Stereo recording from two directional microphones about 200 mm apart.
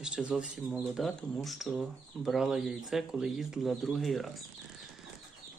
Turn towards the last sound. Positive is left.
turn(degrees=0)  # may be behind; listen again after turning